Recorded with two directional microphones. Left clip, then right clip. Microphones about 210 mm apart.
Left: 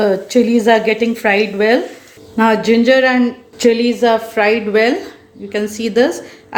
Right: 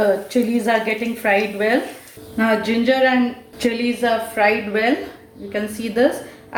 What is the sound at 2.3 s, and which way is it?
Speech, 50° left (ahead or behind).